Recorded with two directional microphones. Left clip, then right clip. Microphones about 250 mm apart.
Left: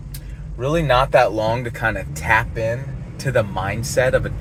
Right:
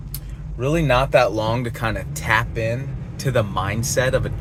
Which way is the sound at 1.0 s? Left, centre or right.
Right.